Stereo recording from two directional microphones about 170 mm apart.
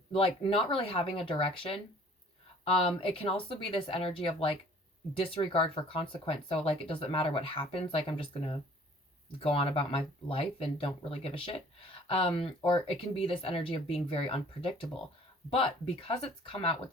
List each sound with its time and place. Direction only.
0.1 s speech: 30° left (ahead or behind)